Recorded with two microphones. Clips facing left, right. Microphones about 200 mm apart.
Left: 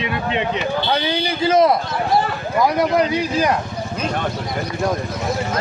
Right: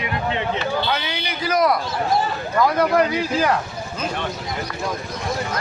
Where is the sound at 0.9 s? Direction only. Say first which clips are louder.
Left 5 dB; 35° left (ahead or behind).